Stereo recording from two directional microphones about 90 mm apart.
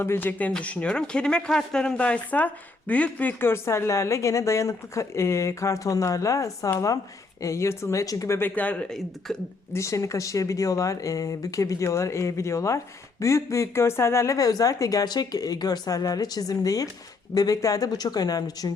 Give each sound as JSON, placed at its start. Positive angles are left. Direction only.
{"t": 0.0, "sound": "speech", "side_deg": 25}
{"t": 8.4, "sound": "speech", "side_deg": 20}
{"t": 9.7, "sound": "speech", "side_deg": 35}